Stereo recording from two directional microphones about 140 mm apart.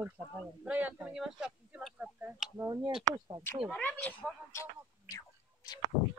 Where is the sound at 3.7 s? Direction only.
10° left (ahead or behind).